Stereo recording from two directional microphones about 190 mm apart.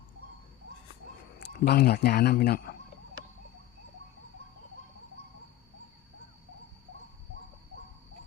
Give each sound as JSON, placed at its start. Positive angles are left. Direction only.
{"t": 1.4, "sound": "a man's voice", "side_deg": 60}